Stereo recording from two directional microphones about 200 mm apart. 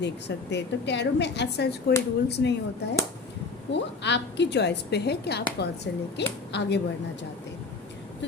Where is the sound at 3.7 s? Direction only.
60° left (ahead or behind).